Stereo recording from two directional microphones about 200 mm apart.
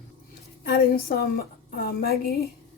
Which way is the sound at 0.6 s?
50° left (ahead or behind).